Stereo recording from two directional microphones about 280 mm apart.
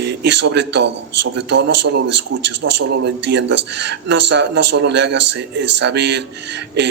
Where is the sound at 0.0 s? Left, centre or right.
Right.